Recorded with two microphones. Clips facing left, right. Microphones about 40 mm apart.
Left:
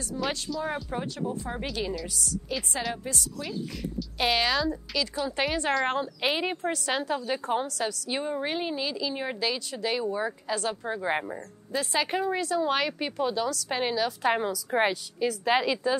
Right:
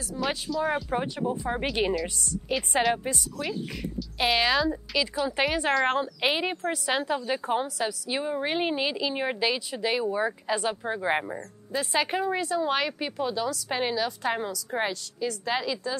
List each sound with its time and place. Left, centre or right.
0.1 s speech: centre
0.9 s a woman's voice: right
2.5 s a woman's voice: right
4.2 s speech: centre
8.5 s speech: right; by 14.3 s centre
14.3 s a woman's voice: centre